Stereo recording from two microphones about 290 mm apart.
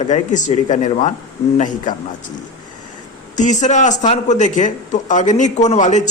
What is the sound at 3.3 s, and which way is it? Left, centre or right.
Speech, left.